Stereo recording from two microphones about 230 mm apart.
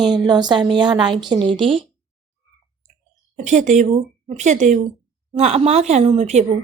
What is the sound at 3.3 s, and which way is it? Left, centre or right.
A woman's voice, right.